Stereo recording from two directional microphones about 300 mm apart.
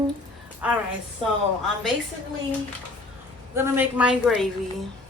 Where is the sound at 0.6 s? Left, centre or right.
Centre.